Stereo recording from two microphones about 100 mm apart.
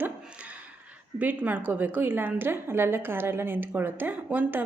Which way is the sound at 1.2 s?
15° right (ahead or behind).